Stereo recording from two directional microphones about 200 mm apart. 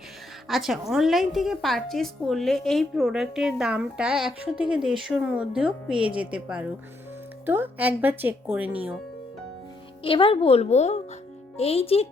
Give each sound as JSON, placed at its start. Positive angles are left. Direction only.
{"t": 0.4, "sound": "a woman's voice", "side_deg": 0}
{"t": 10.0, "sound": "speech", "side_deg": 25}